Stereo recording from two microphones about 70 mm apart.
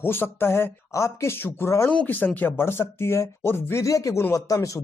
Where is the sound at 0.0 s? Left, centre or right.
Left.